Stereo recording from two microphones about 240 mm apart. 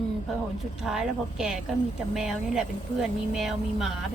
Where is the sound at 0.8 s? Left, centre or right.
Centre.